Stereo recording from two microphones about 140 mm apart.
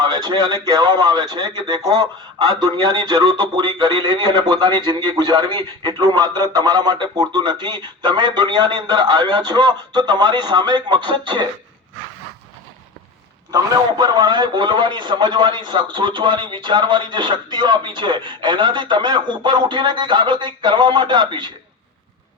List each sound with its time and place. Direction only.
0.0 s speech: 35° right (ahead or behind)
13.5 s speech: 30° right (ahead or behind)